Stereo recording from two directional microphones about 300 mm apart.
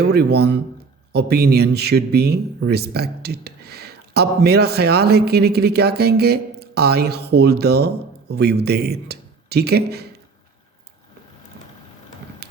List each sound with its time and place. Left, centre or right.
0.0 s speech: right
12.4 s mechanisms: right